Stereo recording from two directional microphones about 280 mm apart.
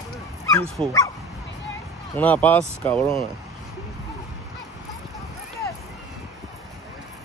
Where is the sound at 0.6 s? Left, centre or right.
Centre.